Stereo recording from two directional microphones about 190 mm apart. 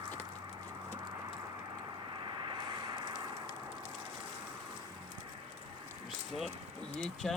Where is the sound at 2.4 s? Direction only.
25° right (ahead or behind).